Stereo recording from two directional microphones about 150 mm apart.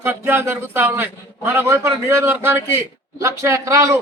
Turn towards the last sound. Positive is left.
turn(degrees=-20)  # may be behind; listen again after turning